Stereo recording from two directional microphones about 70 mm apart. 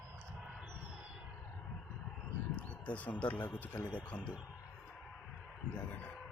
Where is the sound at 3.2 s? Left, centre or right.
Left.